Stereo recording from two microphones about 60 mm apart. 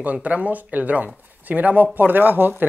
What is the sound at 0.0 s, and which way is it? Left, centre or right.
Speech, right.